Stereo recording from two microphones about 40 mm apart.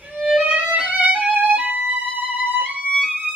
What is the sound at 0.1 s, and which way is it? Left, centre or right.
Violin, right.